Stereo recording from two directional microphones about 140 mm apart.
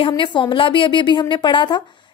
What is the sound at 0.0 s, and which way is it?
A woman's voice, 35° left (ahead or behind).